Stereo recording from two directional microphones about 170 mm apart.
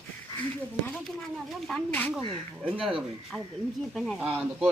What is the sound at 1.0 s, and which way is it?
Speech, centre (ahead or behind).